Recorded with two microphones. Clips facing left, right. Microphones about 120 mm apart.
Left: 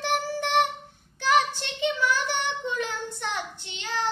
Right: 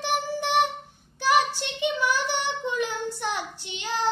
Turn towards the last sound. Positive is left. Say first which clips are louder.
# right 2 dB
turn(degrees=-15)  # may be behind; listen again after turning